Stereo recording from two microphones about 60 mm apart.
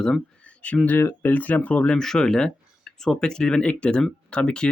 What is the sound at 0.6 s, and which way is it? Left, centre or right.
Speech, left.